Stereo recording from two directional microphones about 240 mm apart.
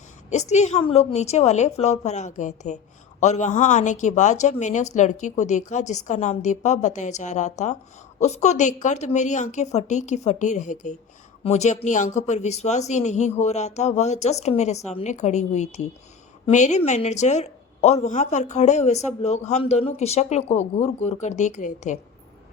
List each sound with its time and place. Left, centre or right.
0.3 s a woman's voice: left